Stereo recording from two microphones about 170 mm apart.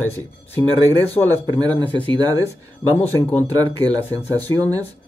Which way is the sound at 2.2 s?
20° right (ahead or behind).